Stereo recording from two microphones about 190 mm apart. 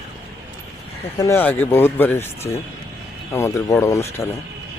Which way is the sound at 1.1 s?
15° left (ahead or behind).